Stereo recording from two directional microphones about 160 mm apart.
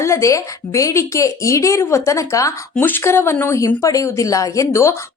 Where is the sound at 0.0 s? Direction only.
20° left (ahead or behind).